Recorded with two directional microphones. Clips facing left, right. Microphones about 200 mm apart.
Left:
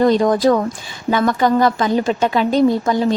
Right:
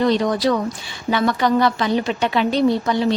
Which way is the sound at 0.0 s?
45° left (ahead or behind).